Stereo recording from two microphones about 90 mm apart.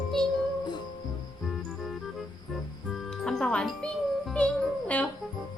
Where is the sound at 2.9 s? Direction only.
5° left (ahead or behind).